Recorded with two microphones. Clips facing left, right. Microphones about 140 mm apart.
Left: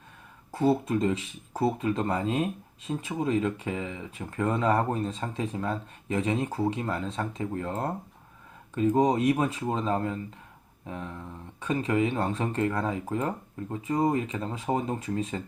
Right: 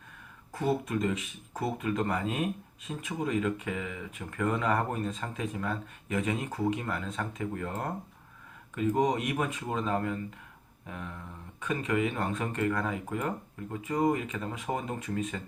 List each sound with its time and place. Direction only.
0.5 s speech: 30° left (ahead or behind)